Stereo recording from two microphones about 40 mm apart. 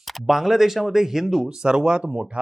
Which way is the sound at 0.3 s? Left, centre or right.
Centre.